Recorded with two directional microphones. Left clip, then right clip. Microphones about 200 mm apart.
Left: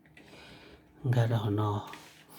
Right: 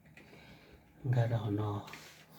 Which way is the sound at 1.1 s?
40° left (ahead or behind).